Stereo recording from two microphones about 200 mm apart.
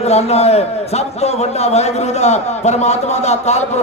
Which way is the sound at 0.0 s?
30° left (ahead or behind).